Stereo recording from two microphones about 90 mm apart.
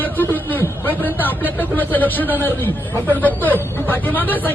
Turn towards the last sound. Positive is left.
turn(degrees=20)  # may be behind; listen again after turning